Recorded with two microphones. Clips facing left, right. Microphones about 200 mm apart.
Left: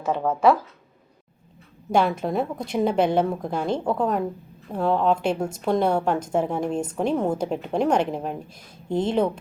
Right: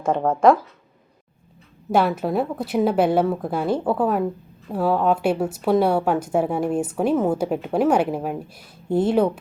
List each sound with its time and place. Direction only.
0.0 s speech: 50° right (ahead or behind)
1.9 s a woman's voice: 5° right (ahead or behind)